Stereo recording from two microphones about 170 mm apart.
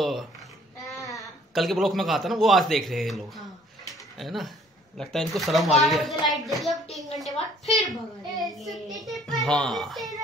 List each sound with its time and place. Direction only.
0.0 s babbling: centre (ahead or behind)
0.9 s a sound: 20° left (ahead or behind)
1.5 s a man's voice: centre (ahead or behind)
8.4 s a man's voice: centre (ahead or behind)